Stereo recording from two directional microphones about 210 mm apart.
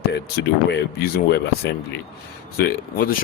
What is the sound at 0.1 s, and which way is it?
Speech, 50° left (ahead or behind).